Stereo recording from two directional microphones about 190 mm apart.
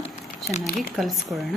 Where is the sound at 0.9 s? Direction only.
Centre (ahead or behind).